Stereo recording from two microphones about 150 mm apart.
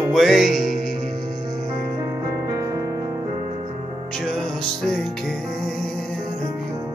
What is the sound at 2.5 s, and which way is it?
Music, 20° right (ahead or behind).